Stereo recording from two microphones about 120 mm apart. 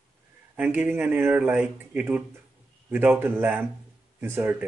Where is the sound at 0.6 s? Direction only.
15° right (ahead or behind).